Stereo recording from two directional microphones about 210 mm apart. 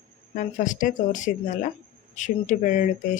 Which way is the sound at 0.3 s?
40° left (ahead or behind).